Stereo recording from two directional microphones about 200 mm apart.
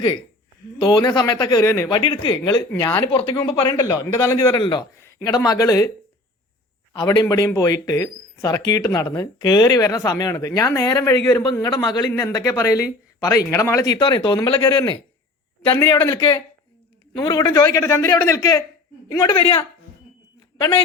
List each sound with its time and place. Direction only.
0.8 s speech: 20° left (ahead or behind)
6.9 s a man's voice: 20° left (ahead or behind)